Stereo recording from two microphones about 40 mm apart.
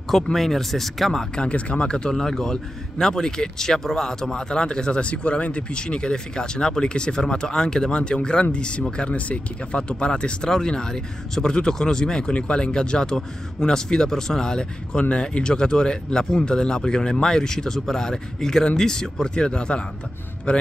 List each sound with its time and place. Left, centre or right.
0.1 s speech: centre
1.3 s speech: left
2.1 s speech: centre
15.0 s speech: left